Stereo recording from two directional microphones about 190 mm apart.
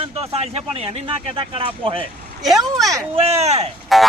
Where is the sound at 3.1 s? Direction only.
30° right (ahead or behind).